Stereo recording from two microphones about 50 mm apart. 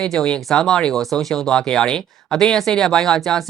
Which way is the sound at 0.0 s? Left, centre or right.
Centre.